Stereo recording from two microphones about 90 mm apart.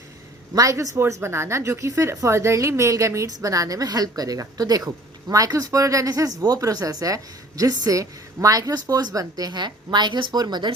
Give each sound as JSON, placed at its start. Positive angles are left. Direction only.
{"t": 0.5, "sound": "a woman's voice", "side_deg": -40}